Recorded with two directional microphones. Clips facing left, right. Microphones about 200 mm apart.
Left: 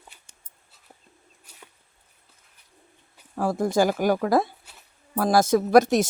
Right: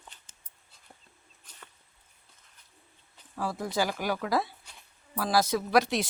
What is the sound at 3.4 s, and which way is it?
Speech, 50° left (ahead or behind).